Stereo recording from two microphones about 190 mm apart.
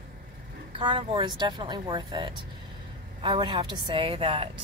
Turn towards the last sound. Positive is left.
turn(degrees=-30)  # may be behind; listen again after turning